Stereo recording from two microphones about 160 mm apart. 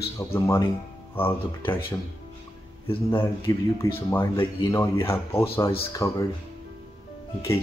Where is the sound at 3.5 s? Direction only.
20° left (ahead or behind).